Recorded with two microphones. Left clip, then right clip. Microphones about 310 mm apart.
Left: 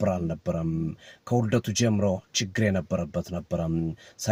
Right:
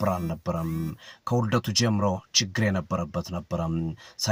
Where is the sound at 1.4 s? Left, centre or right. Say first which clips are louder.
Right 1 dB; centre.